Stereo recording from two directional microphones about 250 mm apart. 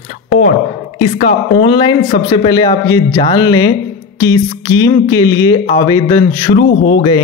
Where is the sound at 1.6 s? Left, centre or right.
Centre.